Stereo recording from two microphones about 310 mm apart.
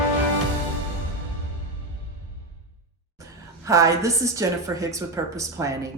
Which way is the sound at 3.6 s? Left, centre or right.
Centre.